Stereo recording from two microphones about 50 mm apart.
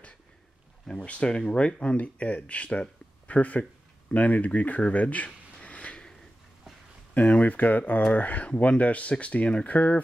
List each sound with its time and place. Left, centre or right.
1.0 s speech: left
4.8 s a sound: left
7.2 s speech: left